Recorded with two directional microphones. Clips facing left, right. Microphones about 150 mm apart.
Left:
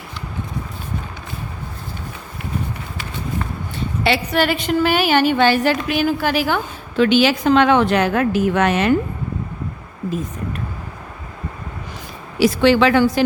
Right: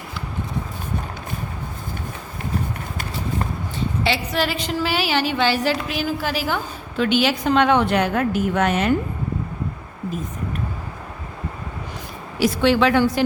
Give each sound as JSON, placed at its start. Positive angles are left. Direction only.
{"t": 4.0, "sound": "a woman's voice", "side_deg": 60}
{"t": 12.4, "sound": "a woman's voice", "side_deg": 90}